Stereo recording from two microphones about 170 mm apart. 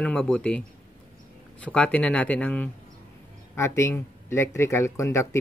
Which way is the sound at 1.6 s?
10° left (ahead or behind).